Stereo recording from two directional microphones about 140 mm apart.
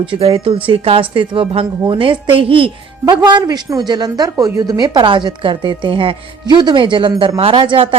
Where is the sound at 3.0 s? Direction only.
30° right (ahead or behind).